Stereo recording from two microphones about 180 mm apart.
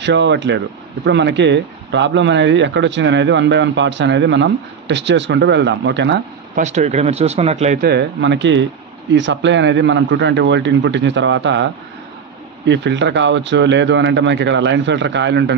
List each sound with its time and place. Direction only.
0.0 s speech: 80° right
6.5 s speech: 40° right (ahead or behind)
7.8 s speech: 65° right (ahead or behind)